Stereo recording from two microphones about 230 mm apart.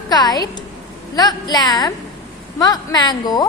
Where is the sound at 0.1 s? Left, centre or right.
Centre.